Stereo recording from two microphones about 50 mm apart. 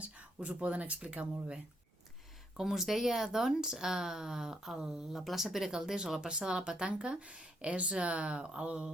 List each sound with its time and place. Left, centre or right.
0.0 s speech: right
2.6 s speech: centre